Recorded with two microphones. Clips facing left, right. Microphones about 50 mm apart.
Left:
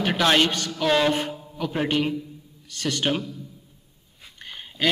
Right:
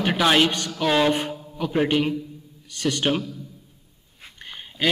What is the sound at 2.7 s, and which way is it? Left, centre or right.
Speech, centre.